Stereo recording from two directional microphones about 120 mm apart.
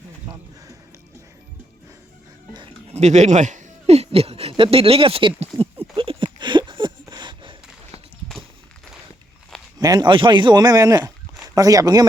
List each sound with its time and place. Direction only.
2.8 s speech: 70° right (ahead or behind); by 5.5 s 50° right (ahead or behind)
6.0 s a sound: 45° right (ahead or behind)
9.8 s a man's voice: 35° right (ahead or behind)